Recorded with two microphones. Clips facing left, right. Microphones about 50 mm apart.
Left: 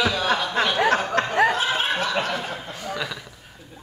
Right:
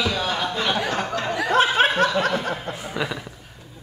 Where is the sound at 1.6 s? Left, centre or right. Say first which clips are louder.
Right 5 dB; right.